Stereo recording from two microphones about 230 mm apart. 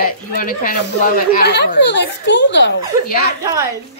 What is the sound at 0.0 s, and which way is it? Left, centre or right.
A woman's voice, left.